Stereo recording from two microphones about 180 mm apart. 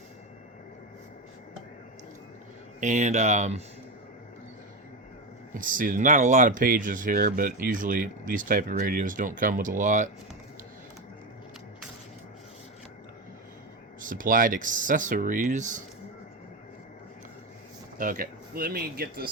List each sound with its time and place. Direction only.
2.8 s speech: 40° right (ahead or behind)
5.5 s speech: 50° right (ahead or behind)
14.0 s speech: 50° right (ahead or behind)
17.9 s speech: 50° right (ahead or behind)